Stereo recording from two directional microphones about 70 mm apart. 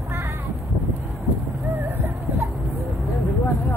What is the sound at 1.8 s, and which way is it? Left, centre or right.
Music, right.